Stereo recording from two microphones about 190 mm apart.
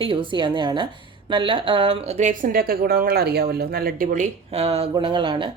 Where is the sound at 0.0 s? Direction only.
25° right (ahead or behind).